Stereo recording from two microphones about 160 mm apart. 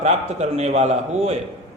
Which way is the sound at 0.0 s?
45° right (ahead or behind).